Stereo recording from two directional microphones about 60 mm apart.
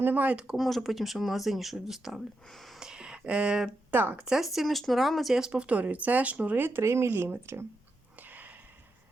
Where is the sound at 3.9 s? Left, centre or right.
Right.